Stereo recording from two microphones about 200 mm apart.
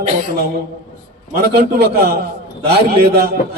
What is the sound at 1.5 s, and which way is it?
A man's voice, 50° right (ahead or behind).